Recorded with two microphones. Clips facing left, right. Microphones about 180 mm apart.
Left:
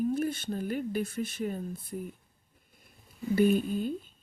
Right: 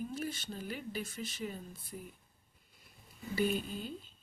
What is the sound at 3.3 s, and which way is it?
Speech, 50° left (ahead or behind).